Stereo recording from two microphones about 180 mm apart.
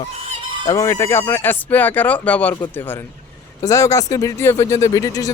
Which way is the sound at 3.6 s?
20° left (ahead or behind).